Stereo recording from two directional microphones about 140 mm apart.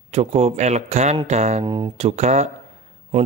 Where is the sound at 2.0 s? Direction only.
50° right (ahead or behind).